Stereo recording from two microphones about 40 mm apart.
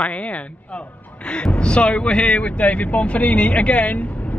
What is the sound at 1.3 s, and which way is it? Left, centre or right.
Speech, left.